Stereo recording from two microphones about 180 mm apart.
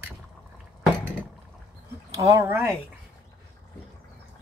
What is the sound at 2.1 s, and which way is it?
Speech, 20° right (ahead or behind).